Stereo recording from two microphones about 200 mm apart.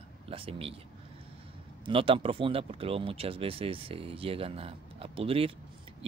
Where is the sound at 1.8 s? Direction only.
25° right (ahead or behind).